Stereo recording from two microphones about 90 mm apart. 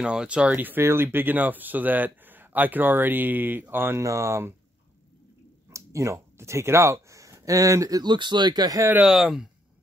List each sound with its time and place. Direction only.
0.0 s speech: 10° right (ahead or behind); by 4.6 s 30° right (ahead or behind)
5.7 s speech: 35° right (ahead or behind)
8.0 s speech: 55° right (ahead or behind); by 8.9 s 40° right (ahead or behind)
9.0 s speech: 5° right (ahead or behind)